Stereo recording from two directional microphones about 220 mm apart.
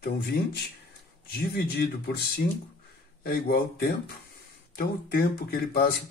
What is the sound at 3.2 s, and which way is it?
Speech, 40° left (ahead or behind).